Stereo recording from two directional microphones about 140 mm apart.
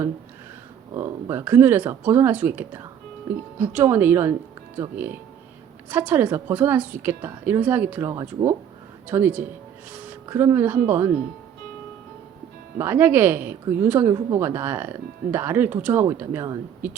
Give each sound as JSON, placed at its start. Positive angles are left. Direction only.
{"t": 0.9, "sound": "a woman's voice", "side_deg": -15}
{"t": 9.9, "sound": "a sound", "side_deg": -10}
{"t": 10.2, "sound": "a woman's voice", "side_deg": -15}
{"t": 12.8, "sound": "a woman's voice", "side_deg": -15}
{"t": 14.1, "sound": "a woman's voice", "side_deg": -25}
{"t": 14.4, "sound": "a woman's voice", "side_deg": -15}